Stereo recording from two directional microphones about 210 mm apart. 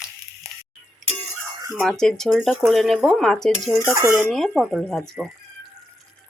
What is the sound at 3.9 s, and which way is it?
Speech, 10° right (ahead or behind).